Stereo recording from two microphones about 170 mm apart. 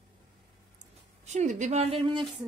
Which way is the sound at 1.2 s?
45° right (ahead or behind).